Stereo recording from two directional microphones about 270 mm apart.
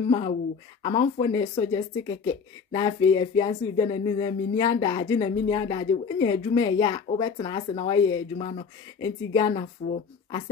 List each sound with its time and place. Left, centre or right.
0.8 s speech: centre